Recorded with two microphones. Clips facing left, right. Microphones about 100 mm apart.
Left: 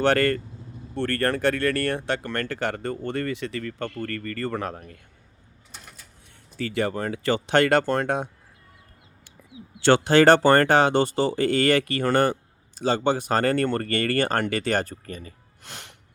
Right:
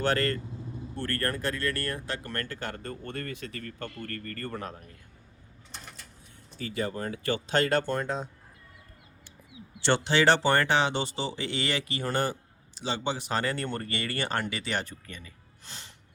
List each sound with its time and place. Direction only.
0.0 s speech: 75° left (ahead or behind); by 4.9 s 90° left
5.7 s bird: 5° left (ahead or behind)
6.6 s speech: 75° left (ahead or behind)
10.0 s speech: 50° left (ahead or behind)
15.6 s music: 60° left (ahead or behind)